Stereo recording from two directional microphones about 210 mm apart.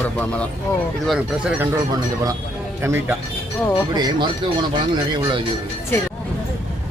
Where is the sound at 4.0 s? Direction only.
20° right (ahead or behind).